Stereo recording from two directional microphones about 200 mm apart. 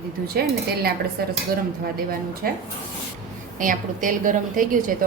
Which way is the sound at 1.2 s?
50° right (ahead or behind).